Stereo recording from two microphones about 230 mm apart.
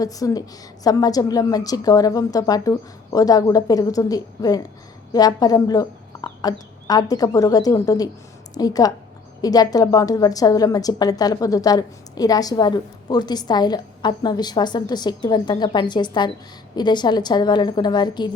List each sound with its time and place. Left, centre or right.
0.0 s a woman's voice: centre